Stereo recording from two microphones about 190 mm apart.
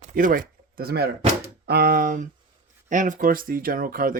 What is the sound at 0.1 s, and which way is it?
Speech, 45° right (ahead or behind).